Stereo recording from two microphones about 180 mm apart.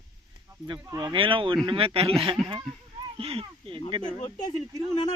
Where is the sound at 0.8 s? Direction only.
20° right (ahead or behind).